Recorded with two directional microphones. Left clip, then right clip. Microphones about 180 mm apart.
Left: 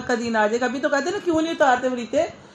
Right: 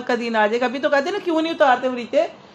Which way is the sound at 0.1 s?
20° right (ahead or behind).